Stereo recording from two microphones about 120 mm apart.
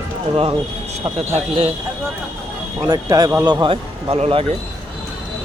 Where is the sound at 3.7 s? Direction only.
50° right (ahead or behind).